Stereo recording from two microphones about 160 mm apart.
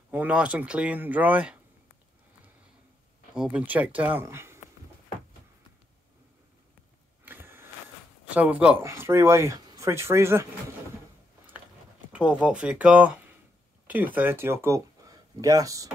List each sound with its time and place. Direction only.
0.1 s speech: 10° right (ahead or behind)
3.3 s speech: 5° right (ahead or behind)
7.2 s a sound: 15° right (ahead or behind)
8.3 s speech: 10° right (ahead or behind)
12.1 s speech: 5° right (ahead or behind)